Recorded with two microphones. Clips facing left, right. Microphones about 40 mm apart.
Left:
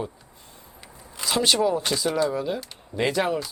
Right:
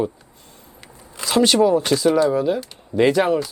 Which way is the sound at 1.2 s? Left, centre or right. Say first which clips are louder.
Right 6 dB; right.